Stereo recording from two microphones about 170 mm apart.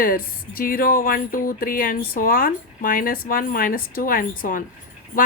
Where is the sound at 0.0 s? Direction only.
60° left (ahead or behind).